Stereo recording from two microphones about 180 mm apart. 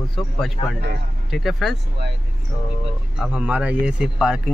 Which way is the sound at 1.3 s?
Centre (ahead or behind).